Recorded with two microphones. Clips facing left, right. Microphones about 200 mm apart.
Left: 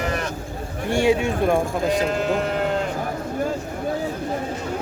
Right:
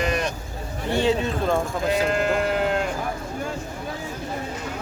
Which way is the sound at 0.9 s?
10° left (ahead or behind).